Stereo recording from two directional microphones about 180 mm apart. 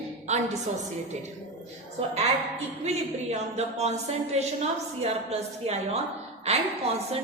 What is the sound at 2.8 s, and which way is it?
A woman's voice, 35° right (ahead or behind).